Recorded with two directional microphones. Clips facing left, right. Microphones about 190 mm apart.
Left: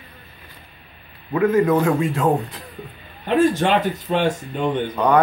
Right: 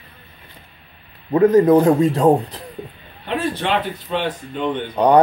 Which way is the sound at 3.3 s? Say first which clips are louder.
Left 5 dB; 45° left (ahead or behind).